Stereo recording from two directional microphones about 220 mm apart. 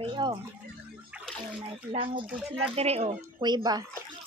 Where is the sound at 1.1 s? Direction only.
5° right (ahead or behind).